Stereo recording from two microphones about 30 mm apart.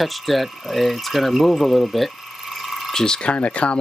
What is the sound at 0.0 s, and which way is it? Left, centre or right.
Speech, centre.